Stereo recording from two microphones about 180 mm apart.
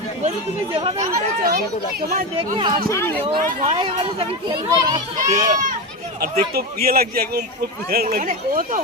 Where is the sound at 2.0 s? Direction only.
55° right (ahead or behind).